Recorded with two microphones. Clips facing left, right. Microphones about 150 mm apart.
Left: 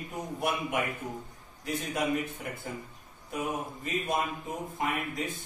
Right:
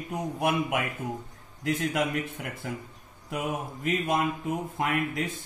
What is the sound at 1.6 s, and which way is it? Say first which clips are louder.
Speech: right 4 dB; 85° right.